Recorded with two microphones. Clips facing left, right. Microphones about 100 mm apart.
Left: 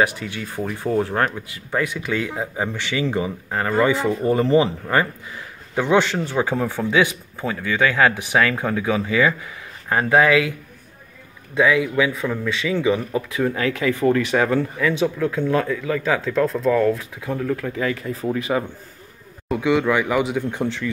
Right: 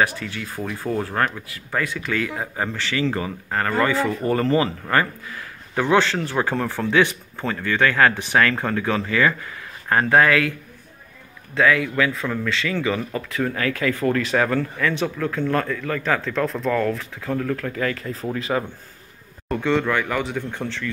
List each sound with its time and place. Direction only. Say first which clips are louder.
0.0 s a man's voice: left 1 dB; 20° left (ahead or behind)
11.5 s a man's voice: left 1 dB; 15° left (ahead or behind)
16.4 s speech: left 4 dB; centre (ahead or behind)
16.7 s a man's voice: left 4 dB; 15° left (ahead or behind)